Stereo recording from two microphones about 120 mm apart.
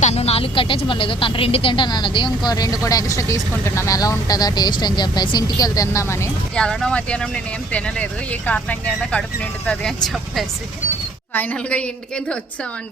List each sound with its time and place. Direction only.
0.0 s speech: 60° left (ahead or behind); by 6.3 s 25° left (ahead or behind)
6.6 s speech: 5° left (ahead or behind)